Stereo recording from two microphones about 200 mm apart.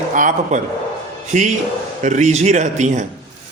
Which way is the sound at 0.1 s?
40° right (ahead or behind).